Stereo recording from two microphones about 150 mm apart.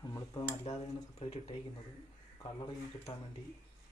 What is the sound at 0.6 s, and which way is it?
Speech, 45° left (ahead or behind).